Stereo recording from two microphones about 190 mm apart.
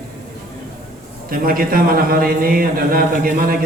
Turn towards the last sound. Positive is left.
turn(degrees=-50)  # may be behind; listen again after turning